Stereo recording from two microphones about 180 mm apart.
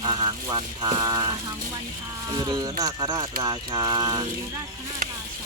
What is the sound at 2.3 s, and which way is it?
Speech, 20° right (ahead or behind).